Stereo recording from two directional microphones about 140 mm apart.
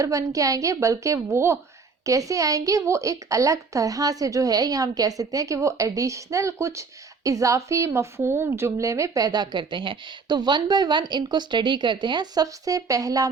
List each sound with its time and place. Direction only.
0.0 s a woman's voice: 25° right (ahead or behind)